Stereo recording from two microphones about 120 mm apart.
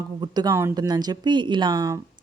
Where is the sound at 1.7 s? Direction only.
25° right (ahead or behind).